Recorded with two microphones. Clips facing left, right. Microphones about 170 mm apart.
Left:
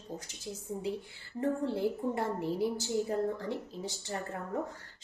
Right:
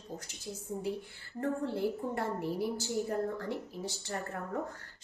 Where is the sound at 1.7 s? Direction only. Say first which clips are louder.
Left 2 dB; 15° left (ahead or behind).